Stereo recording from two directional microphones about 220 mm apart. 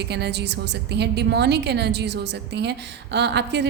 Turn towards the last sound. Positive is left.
turn(degrees=-50)  # may be behind; listen again after turning